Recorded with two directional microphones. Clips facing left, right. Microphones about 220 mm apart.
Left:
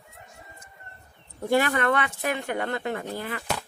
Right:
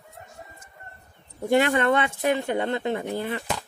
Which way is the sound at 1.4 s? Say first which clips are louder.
Right 2 dB; 20° right (ahead or behind).